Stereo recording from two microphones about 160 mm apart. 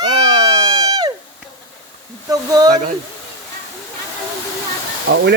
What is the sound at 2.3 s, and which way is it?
Speech, 25° right (ahead or behind).